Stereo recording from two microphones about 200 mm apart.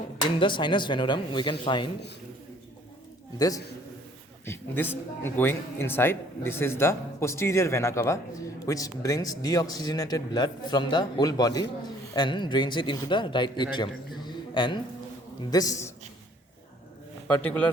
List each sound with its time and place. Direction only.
0.3 s a man's voice: 25° left (ahead or behind)
3.3 s a man's voice: 20° left (ahead or behind)
17.2 s speech: 5° left (ahead or behind)